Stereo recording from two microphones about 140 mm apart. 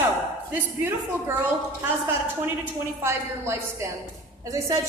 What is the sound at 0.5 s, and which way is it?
Speech, 10° right (ahead or behind).